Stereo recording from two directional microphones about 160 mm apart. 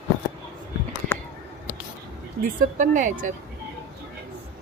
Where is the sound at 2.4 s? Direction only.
55° right (ahead or behind).